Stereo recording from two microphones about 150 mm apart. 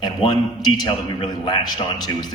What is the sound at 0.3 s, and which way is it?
A man's voice, 30° left (ahead or behind).